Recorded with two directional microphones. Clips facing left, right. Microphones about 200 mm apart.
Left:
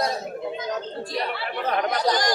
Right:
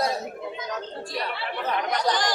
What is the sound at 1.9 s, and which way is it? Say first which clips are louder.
Chatter: even; 40° left (ahead or behind).